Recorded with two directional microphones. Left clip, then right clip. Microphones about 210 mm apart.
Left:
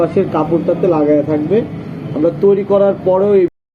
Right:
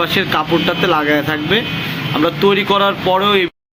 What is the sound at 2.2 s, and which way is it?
A man's voice, 35° right (ahead or behind).